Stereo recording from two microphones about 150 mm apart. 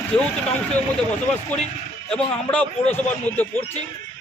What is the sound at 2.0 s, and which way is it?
A man's voice, 10° left (ahead or behind).